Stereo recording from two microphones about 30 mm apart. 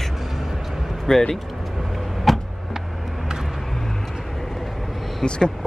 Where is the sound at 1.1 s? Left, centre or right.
Centre.